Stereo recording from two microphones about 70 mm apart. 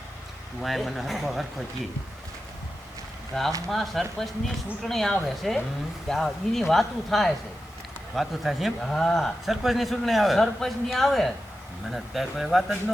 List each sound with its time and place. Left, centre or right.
0.6 s a man's voice: centre
3.7 s a man's voice: centre